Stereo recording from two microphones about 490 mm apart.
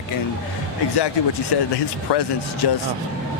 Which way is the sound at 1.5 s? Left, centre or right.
Left.